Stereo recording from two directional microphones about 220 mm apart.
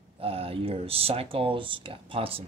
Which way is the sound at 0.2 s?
25° right (ahead or behind).